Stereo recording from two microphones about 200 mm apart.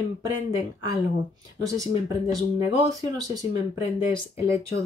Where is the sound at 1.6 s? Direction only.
15° right (ahead or behind).